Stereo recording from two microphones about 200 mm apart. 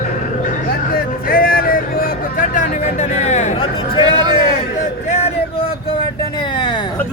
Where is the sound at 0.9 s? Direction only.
50° left (ahead or behind); by 4.0 s 25° left (ahead or behind).